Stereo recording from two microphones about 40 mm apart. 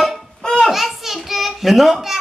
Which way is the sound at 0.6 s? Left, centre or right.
Centre.